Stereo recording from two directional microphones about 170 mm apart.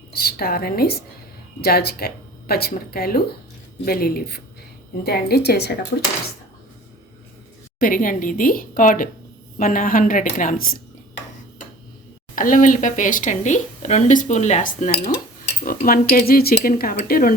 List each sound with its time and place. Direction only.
0.1 s a woman's voice: 65° left (ahead or behind)
7.8 s speech: 55° left (ahead or behind)
12.4 s speech: 50° left (ahead or behind)
15.6 s speech: 55° left (ahead or behind)